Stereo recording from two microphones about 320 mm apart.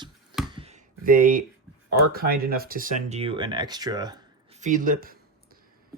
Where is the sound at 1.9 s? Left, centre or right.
Right.